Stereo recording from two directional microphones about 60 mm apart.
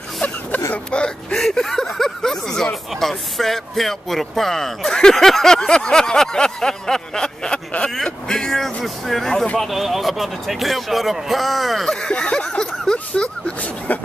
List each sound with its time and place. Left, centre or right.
0.9 s whimper: centre
1.5 s speech: centre
11.9 s speech: centre